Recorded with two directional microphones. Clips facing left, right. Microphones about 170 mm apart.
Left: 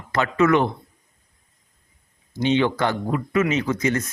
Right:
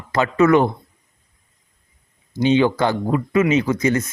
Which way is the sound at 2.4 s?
35° right (ahead or behind).